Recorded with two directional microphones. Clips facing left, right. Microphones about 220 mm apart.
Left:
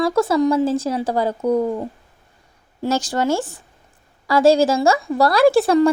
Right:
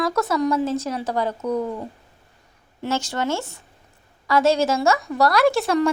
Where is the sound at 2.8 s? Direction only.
35° left (ahead or behind).